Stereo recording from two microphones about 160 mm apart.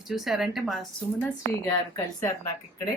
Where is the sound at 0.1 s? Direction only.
Centre (ahead or behind).